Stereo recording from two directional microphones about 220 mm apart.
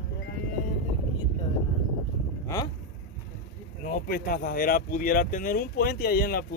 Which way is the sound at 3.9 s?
40° left (ahead or behind).